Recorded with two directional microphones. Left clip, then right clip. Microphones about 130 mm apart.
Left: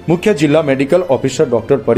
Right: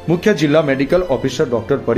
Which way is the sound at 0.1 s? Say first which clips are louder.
Left 2 dB; 15° left (ahead or behind).